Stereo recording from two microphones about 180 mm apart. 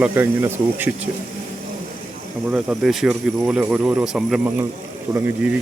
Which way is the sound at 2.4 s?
5° right (ahead or behind).